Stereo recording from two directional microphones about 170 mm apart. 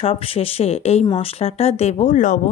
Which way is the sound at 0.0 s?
35° left (ahead or behind).